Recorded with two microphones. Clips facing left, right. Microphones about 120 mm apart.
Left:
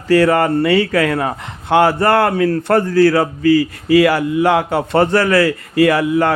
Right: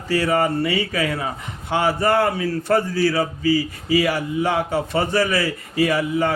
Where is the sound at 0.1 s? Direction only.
70° left (ahead or behind).